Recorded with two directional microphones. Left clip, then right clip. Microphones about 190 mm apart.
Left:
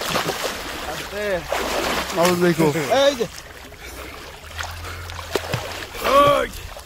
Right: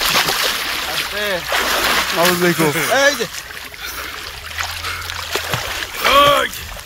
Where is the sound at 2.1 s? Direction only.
40° right (ahead or behind).